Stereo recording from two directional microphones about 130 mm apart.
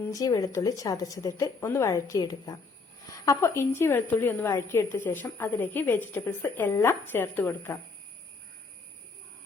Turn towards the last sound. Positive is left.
turn(degrees=15)  # may be behind; listen again after turning